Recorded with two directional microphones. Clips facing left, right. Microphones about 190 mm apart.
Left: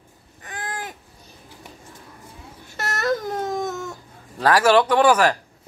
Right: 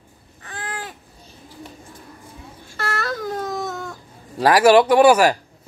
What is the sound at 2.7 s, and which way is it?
Baby cry, 20° left (ahead or behind).